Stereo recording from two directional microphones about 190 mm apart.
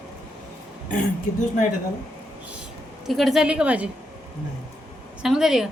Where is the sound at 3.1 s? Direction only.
Centre (ahead or behind).